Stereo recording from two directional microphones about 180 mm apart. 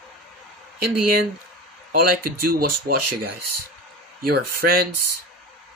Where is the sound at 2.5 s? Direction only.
55° right (ahead or behind).